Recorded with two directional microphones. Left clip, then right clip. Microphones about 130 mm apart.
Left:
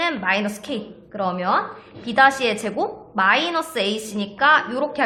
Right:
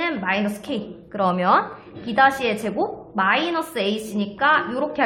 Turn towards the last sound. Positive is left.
turn(degrees=5)  # may be behind; listen again after turning